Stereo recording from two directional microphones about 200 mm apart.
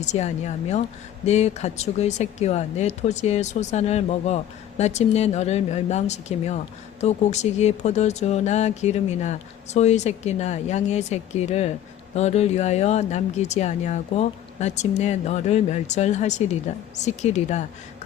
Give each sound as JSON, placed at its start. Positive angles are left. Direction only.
{"t": 0.0, "sound": "speech", "side_deg": 35}